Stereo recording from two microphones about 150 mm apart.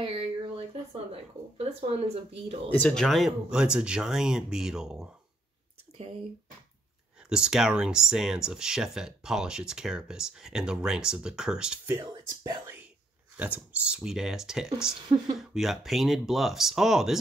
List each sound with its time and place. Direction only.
0.0 s speech: 35° right (ahead or behind)
2.7 s speech: 5° left (ahead or behind)
7.2 s speech: 5° right (ahead or behind)
12.0 s speech: 30° right (ahead or behind)
13.4 s speech: 10° right (ahead or behind)
15.0 s speech: 30° right (ahead or behind)
15.3 s speech: centre (ahead or behind)